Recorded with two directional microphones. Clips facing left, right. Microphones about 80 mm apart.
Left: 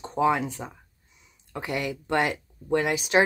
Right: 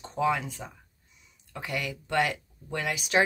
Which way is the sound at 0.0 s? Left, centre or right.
Left.